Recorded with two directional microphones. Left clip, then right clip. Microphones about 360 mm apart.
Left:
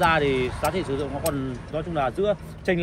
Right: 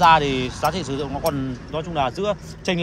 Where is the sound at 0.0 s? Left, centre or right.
Centre.